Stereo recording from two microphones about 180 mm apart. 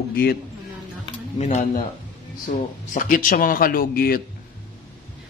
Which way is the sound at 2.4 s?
50° left (ahead or behind).